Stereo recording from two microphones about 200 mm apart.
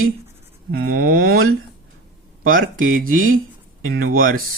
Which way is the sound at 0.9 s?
45° right (ahead or behind).